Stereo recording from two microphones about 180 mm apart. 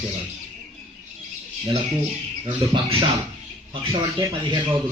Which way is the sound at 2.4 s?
25° right (ahead or behind).